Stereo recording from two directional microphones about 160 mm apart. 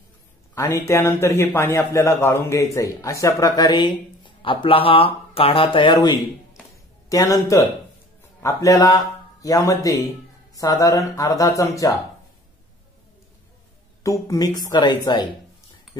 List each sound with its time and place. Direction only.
0.6 s a man's voice: 20° left (ahead or behind)
14.0 s a man's voice: 20° left (ahead or behind)